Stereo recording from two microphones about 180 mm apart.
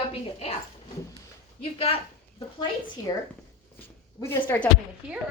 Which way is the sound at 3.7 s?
10° left (ahead or behind).